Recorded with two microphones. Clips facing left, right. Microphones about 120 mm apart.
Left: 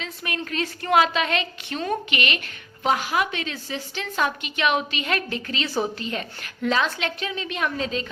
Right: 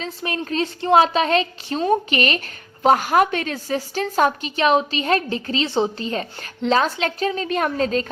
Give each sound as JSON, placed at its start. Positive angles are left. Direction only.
{"t": 0.0, "sound": "a woman's voice", "side_deg": -30}